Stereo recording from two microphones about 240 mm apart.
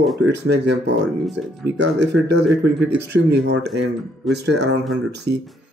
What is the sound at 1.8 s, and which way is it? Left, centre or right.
Speech, right.